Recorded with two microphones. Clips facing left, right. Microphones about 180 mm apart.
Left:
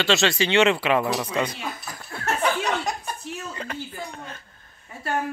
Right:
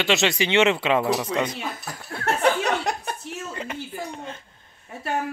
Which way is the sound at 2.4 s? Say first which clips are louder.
Right 3 dB; 60° right (ahead or behind).